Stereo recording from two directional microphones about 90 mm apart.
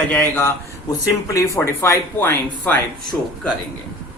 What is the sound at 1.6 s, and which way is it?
Speech, 25° left (ahead or behind).